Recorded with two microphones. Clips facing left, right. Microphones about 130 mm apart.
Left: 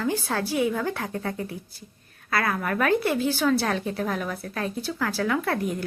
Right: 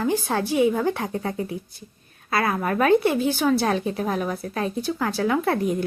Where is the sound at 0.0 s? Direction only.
20° right (ahead or behind).